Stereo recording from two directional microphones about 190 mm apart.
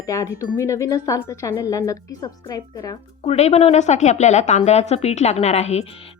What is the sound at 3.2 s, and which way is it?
Speech, 35° left (ahead or behind).